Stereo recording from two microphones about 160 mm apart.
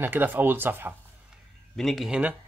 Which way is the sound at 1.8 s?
Centre (ahead or behind).